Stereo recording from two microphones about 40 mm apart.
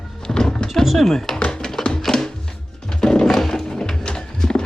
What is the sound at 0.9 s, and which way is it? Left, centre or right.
Speech, centre.